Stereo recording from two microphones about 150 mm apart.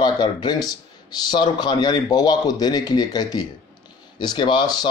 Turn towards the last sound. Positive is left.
turn(degrees=30)  # may be behind; listen again after turning